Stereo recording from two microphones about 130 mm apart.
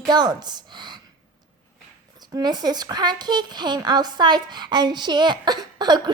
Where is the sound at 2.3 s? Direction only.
30° right (ahead or behind).